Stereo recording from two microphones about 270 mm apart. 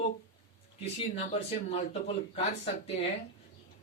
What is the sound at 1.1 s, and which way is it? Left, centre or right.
Speech, left.